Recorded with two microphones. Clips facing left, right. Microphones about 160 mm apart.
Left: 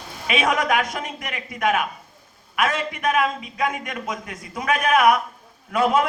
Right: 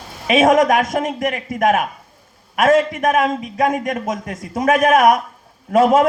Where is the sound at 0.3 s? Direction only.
45° right (ahead or behind).